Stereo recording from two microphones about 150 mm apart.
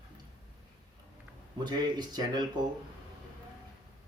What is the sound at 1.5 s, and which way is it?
Speech, 30° right (ahead or behind).